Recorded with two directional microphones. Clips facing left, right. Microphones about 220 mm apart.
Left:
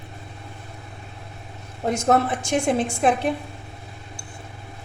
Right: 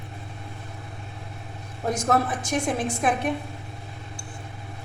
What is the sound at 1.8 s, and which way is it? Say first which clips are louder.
A woman's voice: left 3 dB; 25° left (ahead or behind).